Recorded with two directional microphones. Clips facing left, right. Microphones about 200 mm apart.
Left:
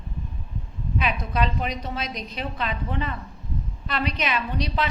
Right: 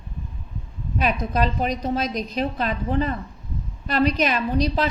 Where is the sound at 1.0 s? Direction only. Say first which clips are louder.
Right 3 dB; 40° right (ahead or behind).